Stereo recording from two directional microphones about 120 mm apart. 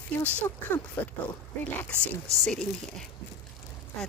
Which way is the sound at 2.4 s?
5° left (ahead or behind).